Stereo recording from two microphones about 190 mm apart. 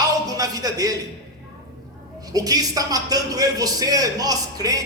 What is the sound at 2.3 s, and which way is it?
A man's voice, 20° right (ahead or behind).